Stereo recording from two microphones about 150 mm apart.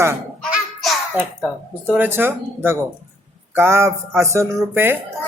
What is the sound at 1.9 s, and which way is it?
Speech, 15° right (ahead or behind).